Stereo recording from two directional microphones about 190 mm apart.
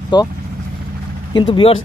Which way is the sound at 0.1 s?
20° left (ahead or behind).